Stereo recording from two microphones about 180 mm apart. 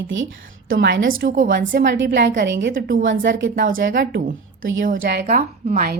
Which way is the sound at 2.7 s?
50° right (ahead or behind).